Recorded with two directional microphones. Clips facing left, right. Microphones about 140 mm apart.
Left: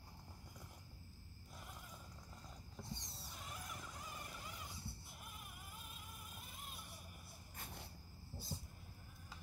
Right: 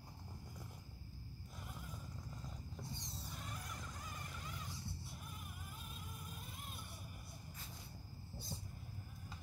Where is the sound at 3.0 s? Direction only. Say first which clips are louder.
Right 4 dB; centre (ahead or behind).